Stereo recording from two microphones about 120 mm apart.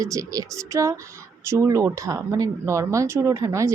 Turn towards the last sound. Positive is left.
turn(degrees=-25)  # may be behind; listen again after turning